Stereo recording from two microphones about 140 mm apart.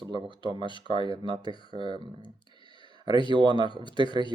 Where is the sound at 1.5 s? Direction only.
35° left (ahead or behind).